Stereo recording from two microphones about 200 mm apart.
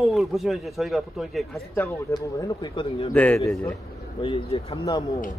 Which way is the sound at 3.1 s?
5° left (ahead or behind).